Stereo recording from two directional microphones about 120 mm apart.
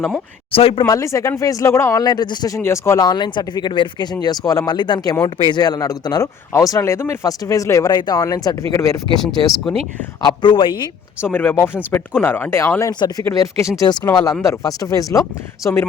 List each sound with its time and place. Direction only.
0.5 s speech: 50° left (ahead or behind)
0.9 s speech: 25° left (ahead or behind)
2.6 s speech: 20° left (ahead or behind)
9.2 s speech: centre (ahead or behind)
10.2 s speech: 40° left (ahead or behind)
11.2 s speech: 20° left (ahead or behind)
12.9 s speech: 35° left (ahead or behind)